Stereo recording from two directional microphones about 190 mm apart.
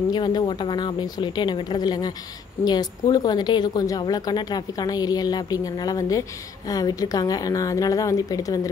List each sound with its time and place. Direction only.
0.1 s a woman's voice: 20° left (ahead or behind)